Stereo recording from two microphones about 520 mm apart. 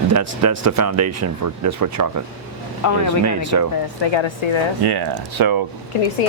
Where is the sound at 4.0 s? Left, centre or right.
Left.